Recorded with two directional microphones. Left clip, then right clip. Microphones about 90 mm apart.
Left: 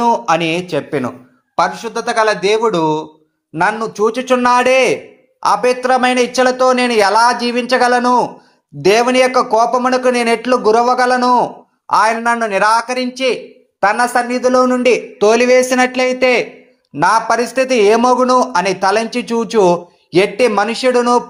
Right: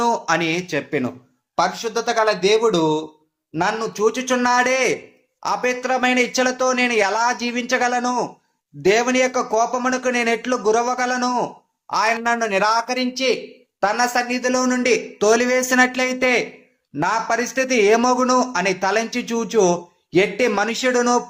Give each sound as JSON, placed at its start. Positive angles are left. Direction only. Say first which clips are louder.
{"t": 0.0, "sound": "speech", "louder": "left 6 dB", "side_deg": 35}
{"t": 8.8, "sound": "speech", "louder": "left 6 dB", "side_deg": 40}
{"t": 11.9, "sound": "a man's voice", "louder": "left 7 dB", "side_deg": 50}
{"t": 12.2, "sound": "speech", "louder": "left 5 dB", "side_deg": 35}